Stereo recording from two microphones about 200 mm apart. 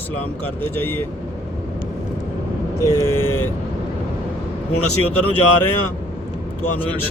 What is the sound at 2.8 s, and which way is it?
Speech, 15° left (ahead or behind).